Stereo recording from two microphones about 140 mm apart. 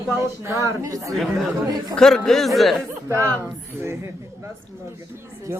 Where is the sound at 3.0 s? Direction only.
20° right (ahead or behind).